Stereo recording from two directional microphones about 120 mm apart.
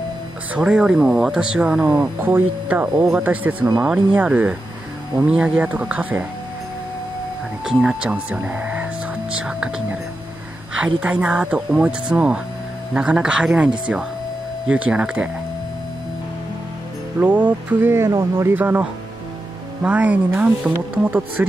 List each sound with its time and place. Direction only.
0.6 s speech: 5° right (ahead or behind)
2.1 s speech: 15° right (ahead or behind)
7.6 s speech: 5° right (ahead or behind)
17.2 s speech: 15° right (ahead or behind)